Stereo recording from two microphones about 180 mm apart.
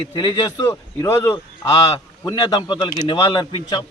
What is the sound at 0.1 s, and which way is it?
A man's voice, 25° left (ahead or behind).